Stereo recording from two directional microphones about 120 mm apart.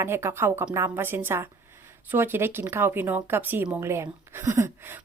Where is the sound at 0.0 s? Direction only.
20° right (ahead or behind).